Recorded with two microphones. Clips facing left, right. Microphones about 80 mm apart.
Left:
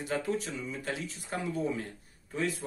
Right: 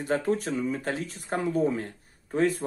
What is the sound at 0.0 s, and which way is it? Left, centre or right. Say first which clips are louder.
Speech: right 6 dB; right.